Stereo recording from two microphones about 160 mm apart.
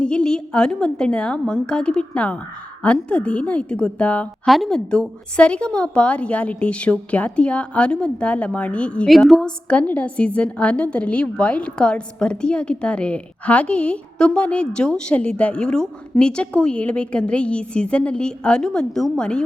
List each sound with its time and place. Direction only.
0.0 s a woman's voice: 5° left (ahead or behind)